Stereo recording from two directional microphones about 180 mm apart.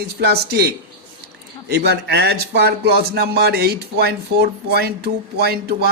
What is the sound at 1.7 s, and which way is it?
Speech, 65° right (ahead or behind).